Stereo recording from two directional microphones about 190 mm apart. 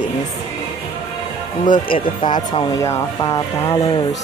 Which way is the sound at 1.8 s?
25° left (ahead or behind).